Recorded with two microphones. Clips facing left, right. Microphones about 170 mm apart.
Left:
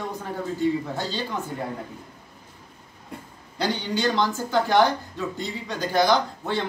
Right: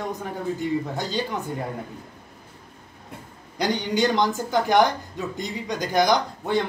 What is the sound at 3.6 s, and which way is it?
A man's voice, 15° right (ahead or behind).